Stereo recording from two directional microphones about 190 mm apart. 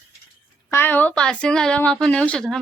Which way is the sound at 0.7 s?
10° left (ahead or behind).